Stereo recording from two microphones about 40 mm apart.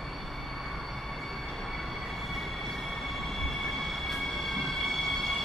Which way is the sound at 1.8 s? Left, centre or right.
Centre.